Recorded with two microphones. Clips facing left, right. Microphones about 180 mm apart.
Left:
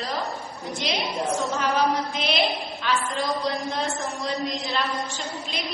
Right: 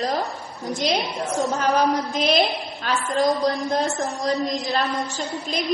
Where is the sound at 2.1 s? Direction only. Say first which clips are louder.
Right 5 dB; 40° right (ahead or behind).